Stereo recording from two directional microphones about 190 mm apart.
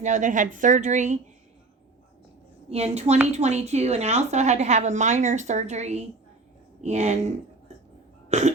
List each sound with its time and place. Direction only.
0.0 s a woman's voice: 40° right (ahead or behind)
2.6 s a woman's voice: 35° right (ahead or behind)
8.3 s burping: 35° right (ahead or behind)